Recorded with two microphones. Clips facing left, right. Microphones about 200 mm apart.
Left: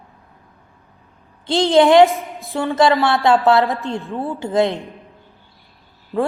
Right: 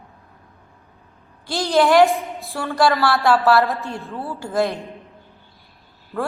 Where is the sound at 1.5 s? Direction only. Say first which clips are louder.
Left 4 dB; 20° left (ahead or behind).